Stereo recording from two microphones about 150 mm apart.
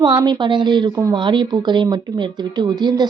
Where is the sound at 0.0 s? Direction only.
30° right (ahead or behind).